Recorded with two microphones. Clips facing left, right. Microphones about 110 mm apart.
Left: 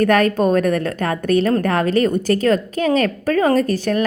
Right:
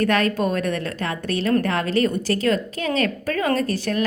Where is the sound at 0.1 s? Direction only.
45° left (ahead or behind).